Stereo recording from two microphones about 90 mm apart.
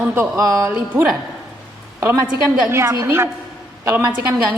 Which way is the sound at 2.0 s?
30° right (ahead or behind).